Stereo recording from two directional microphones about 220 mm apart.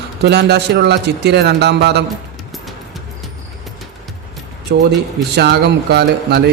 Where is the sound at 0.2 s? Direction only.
50° right (ahead or behind).